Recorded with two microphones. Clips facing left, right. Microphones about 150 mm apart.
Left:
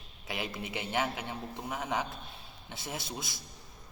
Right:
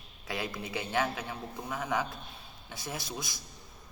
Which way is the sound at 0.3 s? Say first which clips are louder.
Right 1 dB; 20° left (ahead or behind).